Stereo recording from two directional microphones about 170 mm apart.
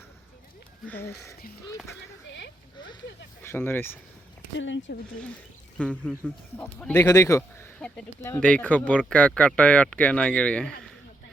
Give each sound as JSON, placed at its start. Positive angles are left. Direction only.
{"t": 0.9, "sound": "speech", "side_deg": 15}
{"t": 2.2, "sound": "speech", "side_deg": 90}
{"t": 3.4, "sound": "speech", "side_deg": 15}
{"t": 4.5, "sound": "speech", "side_deg": 90}
{"t": 5.7, "sound": "speech", "side_deg": 5}
{"t": 8.4, "sound": "speech", "side_deg": 5}